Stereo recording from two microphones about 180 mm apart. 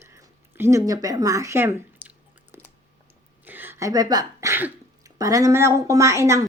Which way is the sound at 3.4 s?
10° right (ahead or behind).